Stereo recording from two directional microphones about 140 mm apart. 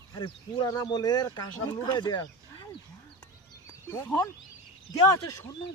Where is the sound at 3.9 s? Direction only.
25° left (ahead or behind).